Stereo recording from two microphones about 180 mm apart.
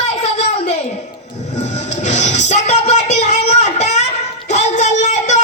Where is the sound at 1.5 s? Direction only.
40° left (ahead or behind).